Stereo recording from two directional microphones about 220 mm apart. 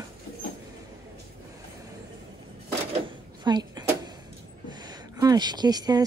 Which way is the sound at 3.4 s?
20° right (ahead or behind).